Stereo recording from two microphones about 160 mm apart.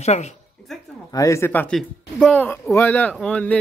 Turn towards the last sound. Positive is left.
turn(degrees=10)  # may be behind; listen again after turning